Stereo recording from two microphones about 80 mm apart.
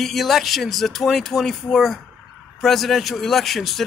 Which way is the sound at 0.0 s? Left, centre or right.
Centre.